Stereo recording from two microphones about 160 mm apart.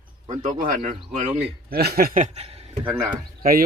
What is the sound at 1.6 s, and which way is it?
Speech, 75° right (ahead or behind).